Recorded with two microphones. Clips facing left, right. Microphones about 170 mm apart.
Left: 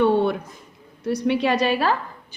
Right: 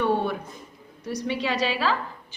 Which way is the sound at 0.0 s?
65° left (ahead or behind).